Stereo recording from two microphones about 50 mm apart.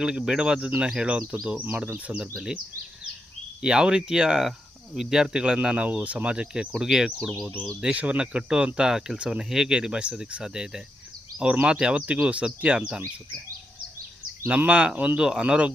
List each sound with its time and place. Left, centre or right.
0.0 s speech: centre
1.5 s speech: right
3.6 s speech: centre
6.7 s speech: centre
7.8 s speech: right
8.9 s speech: centre
9.1 s speech: right
14.4 s speech: right
15.2 s speech: centre